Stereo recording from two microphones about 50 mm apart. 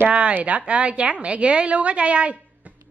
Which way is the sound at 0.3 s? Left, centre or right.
Right.